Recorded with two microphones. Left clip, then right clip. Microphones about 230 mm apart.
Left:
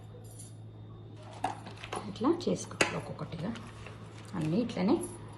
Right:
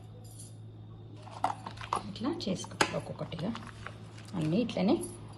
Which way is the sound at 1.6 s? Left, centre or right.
Centre.